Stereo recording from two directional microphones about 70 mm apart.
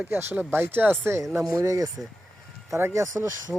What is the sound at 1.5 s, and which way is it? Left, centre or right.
Speech, right.